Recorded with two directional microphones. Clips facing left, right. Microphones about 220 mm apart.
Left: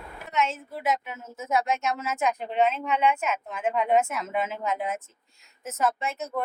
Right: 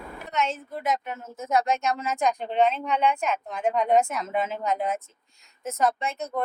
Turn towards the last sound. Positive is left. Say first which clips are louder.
# right 2 dB
turn(degrees=5)  # may be behind; listen again after turning